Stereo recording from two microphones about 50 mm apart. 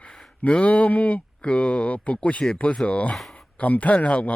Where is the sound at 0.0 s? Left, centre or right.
Centre.